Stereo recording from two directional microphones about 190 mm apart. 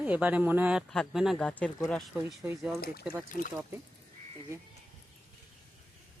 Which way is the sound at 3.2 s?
45° left (ahead or behind).